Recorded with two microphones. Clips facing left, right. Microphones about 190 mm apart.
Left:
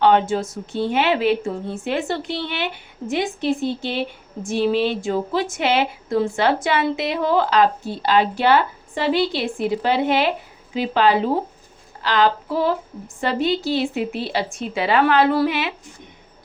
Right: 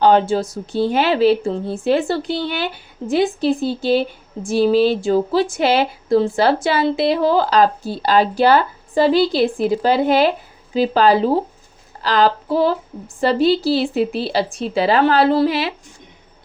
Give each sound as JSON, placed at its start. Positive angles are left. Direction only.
{"t": 0.0, "sound": "a woman's voice", "side_deg": -35}